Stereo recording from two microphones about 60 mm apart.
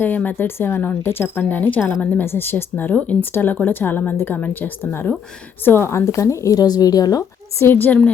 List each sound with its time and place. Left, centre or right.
0.0 s speech: left
2.0 s speech: left
7.6 s speech: left